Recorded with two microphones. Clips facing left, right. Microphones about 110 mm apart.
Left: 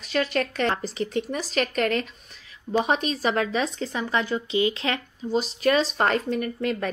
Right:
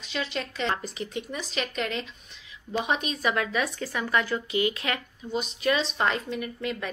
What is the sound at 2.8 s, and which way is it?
Speech, 40° left (ahead or behind).